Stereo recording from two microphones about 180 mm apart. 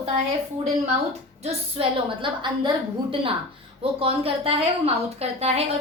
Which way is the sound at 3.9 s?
30° right (ahead or behind).